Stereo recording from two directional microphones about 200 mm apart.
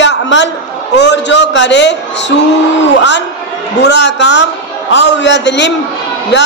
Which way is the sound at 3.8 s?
60° left (ahead or behind).